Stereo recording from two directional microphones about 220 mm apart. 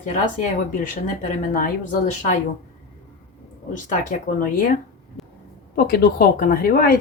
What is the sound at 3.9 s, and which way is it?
Speech, 35° left (ahead or behind).